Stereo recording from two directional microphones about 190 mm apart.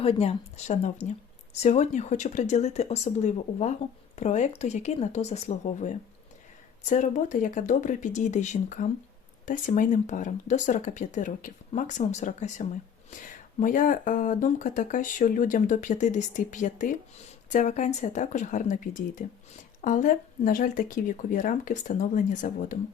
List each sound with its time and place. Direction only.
0.0 s speech: 30° left (ahead or behind)